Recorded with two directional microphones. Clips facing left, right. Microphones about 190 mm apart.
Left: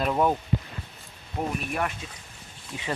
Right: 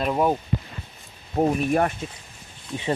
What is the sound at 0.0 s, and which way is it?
Speech, 10° right (ahead or behind).